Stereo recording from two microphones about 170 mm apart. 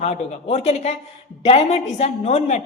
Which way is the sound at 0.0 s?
40° left (ahead or behind).